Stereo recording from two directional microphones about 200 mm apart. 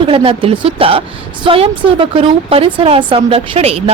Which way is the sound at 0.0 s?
25° right (ahead or behind).